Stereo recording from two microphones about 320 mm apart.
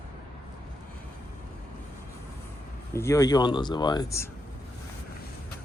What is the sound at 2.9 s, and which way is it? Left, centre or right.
Speech, centre.